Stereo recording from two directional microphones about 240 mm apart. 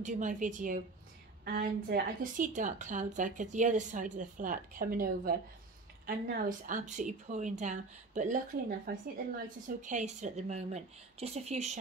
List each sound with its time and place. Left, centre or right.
0.0 s a woman's voice: right